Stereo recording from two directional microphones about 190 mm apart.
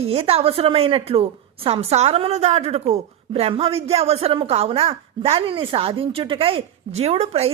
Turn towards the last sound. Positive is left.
turn(degrees=-35)  # may be behind; listen again after turning